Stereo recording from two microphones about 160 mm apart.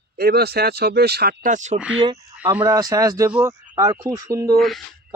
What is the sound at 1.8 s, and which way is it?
Speech, 5° right (ahead or behind).